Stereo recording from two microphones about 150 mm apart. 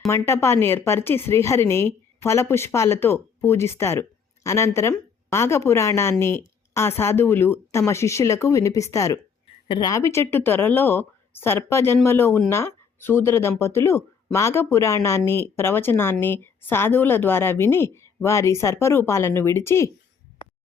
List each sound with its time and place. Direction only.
0.1 s a woman's voice: 20° left (ahead or behind)